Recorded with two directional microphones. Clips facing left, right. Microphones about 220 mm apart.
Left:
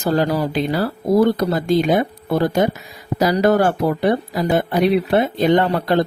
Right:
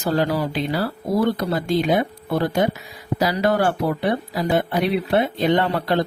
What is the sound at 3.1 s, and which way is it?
Speech, 45° left (ahead or behind).